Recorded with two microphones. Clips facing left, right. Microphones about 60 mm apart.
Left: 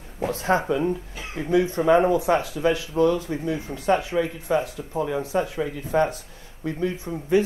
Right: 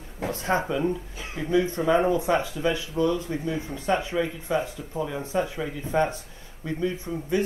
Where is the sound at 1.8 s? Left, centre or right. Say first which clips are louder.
Left 5 dB; left.